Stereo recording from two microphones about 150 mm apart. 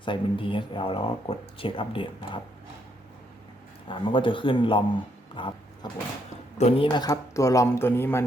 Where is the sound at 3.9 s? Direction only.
35° left (ahead or behind).